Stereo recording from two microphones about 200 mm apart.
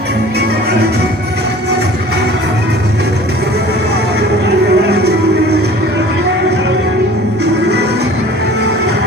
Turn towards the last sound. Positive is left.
turn(degrees=-55)  # may be behind; listen again after turning